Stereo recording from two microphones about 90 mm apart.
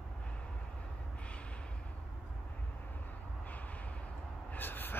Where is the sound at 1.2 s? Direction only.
15° left (ahead or behind).